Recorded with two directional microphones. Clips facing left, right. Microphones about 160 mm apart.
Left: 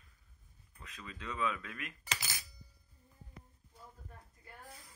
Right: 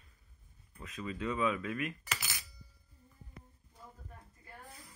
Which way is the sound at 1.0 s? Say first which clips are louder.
Right 5 dB; 10° right (ahead or behind).